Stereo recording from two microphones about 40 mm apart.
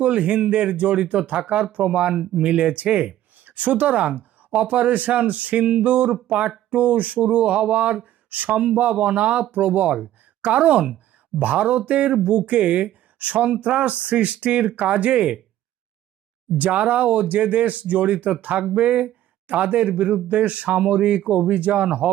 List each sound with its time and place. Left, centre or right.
0.0 s speech: right
6.2 s a sound: right
6.7 s speech: right
16.6 s speech: right